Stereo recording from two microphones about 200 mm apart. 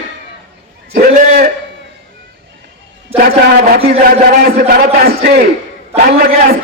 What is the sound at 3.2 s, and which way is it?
A man's voice, 45° right (ahead or behind).